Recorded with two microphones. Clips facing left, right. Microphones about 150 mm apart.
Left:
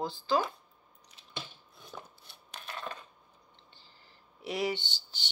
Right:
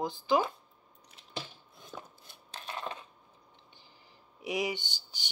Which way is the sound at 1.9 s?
Centre (ahead or behind).